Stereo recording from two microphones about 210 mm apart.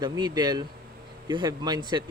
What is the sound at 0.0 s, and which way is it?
Speech, 20° right (ahead or behind).